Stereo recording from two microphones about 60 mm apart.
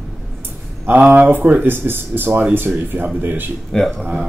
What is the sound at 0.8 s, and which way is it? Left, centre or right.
Speech, right.